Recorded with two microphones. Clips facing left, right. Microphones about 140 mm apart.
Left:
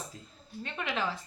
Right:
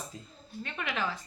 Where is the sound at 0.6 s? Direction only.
30° left (ahead or behind).